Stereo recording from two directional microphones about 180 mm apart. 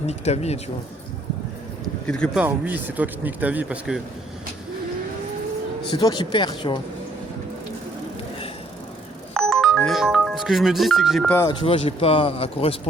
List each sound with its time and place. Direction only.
0.1 s speech: 35° left (ahead or behind)
1.8 s speech: 5° left (ahead or behind)
2.4 s speech: 10° right (ahead or behind)
5.9 s speech: 25° left (ahead or behind)
9.3 s speech: 5° left (ahead or behind)
11.6 s speech: 30° left (ahead or behind)